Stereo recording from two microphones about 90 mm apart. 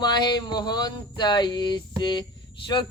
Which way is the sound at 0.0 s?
50° left (ahead or behind).